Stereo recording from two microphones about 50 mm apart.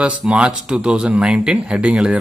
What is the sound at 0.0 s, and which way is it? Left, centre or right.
Speech, right.